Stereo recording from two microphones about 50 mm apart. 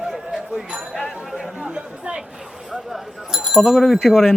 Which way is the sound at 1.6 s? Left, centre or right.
Right.